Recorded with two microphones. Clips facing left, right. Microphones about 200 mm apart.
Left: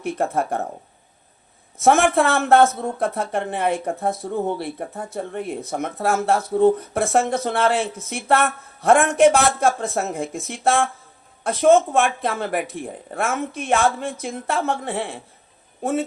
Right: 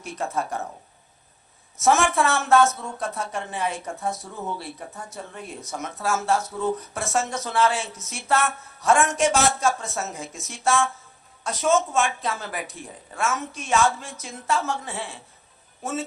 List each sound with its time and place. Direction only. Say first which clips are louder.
0.0 s speech: left 6 dB; 55° left (ahead or behind)
1.8 s speech: left 4 dB; 55° left (ahead or behind)